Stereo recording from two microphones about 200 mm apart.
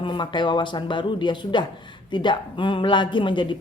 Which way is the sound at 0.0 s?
25° left (ahead or behind).